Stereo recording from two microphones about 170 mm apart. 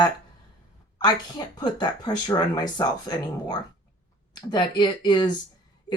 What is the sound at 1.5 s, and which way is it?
Speech, 25° left (ahead or behind).